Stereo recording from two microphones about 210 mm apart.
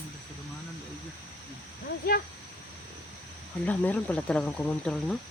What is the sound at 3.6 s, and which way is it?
Speech, 5° left (ahead or behind).